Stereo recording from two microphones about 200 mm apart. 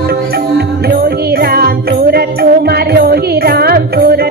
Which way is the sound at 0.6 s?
50° right (ahead or behind).